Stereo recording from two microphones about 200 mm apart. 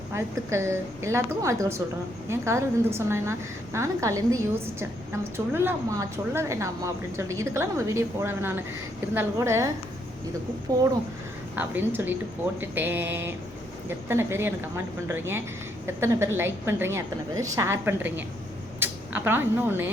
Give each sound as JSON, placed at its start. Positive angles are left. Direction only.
{"t": 0.1, "sound": "a woman's voice", "side_deg": -15}
{"t": 11.5, "sound": "a woman's voice", "side_deg": -10}